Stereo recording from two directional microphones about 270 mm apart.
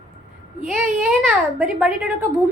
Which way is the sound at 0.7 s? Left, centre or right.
Centre.